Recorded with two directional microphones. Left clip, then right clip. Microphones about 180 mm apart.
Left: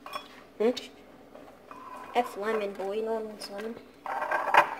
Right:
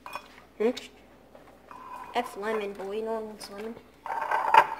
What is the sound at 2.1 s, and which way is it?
Speech, 25° right (ahead or behind).